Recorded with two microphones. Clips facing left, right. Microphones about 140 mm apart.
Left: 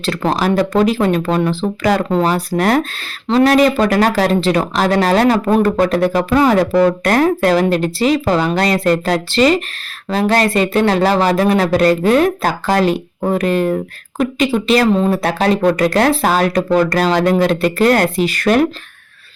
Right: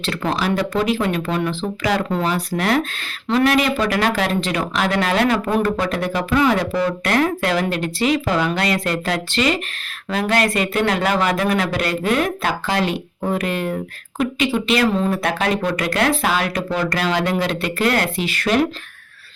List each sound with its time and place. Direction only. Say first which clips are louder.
0.0 s speech: left 5 dB; 40° left (ahead or behind)
14.9 s speech: left 5 dB; 25° left (ahead or behind); by 18.7 s 50° left (ahead or behind)